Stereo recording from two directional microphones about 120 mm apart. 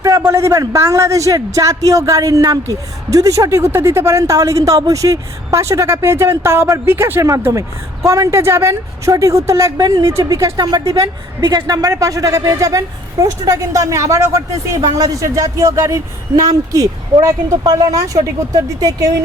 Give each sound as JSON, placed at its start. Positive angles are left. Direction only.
{"t": 0.0, "sound": "a man's voice", "side_deg": -30}